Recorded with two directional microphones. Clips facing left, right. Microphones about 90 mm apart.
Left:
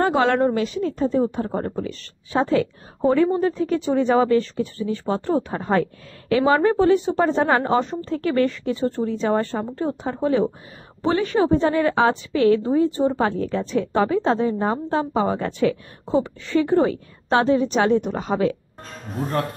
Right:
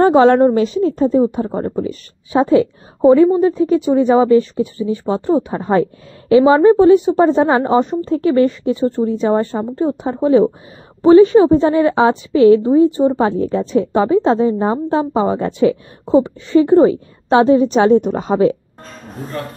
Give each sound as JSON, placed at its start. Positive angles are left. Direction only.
{"t": 0.0, "sound": "a woman's voice", "side_deg": -25}